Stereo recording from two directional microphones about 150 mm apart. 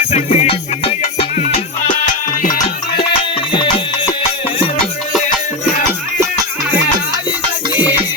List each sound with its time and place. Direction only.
0.1 s music: 45° left (ahead or behind)
3.5 s music: 35° left (ahead or behind)